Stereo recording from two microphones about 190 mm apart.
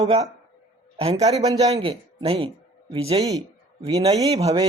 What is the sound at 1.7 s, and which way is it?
Speech, 20° right (ahead or behind).